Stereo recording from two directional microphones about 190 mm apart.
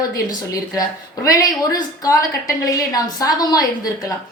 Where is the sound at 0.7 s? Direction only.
15° left (ahead or behind).